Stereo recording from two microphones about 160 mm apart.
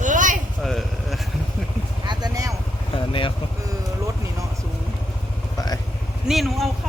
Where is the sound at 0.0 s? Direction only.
55° right (ahead or behind).